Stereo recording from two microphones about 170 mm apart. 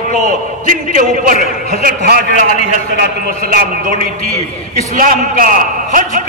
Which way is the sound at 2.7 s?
60° right (ahead or behind).